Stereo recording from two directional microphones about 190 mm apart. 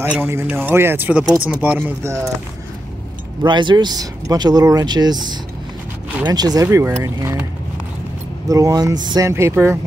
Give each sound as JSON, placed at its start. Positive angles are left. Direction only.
{"t": 0.0, "sound": "speech", "side_deg": -10}
{"t": 3.4, "sound": "speech", "side_deg": -25}
{"t": 8.5, "sound": "speech", "side_deg": -20}